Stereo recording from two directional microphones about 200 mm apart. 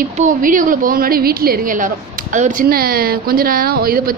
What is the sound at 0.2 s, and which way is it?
A woman's voice, 40° right (ahead or behind).